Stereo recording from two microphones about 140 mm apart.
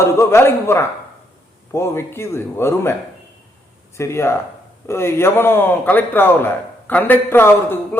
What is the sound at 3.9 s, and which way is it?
A man's voice, 20° left (ahead or behind).